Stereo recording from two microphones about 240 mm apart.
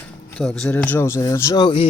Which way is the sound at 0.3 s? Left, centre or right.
Centre.